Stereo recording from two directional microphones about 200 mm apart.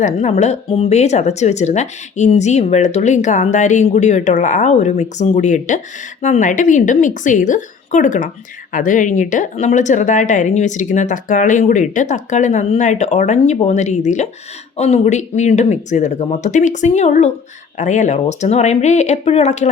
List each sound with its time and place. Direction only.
0.0 s speech: 35° left (ahead or behind)